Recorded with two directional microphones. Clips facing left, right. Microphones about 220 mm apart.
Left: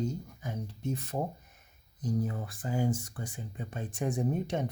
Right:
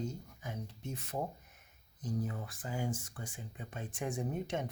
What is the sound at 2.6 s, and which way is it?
Speech, 40° left (ahead or behind).